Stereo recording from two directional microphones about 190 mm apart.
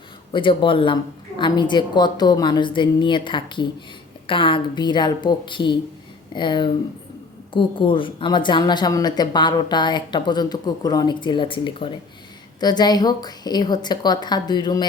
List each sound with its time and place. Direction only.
0.3 s a woman's voice: 25° left (ahead or behind)